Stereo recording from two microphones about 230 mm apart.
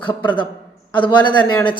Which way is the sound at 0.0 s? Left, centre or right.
Left.